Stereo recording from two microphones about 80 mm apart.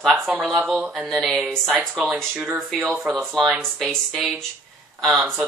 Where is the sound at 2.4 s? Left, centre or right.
Centre.